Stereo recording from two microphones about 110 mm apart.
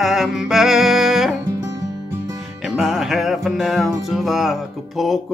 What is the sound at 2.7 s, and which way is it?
Music, 5° right (ahead or behind).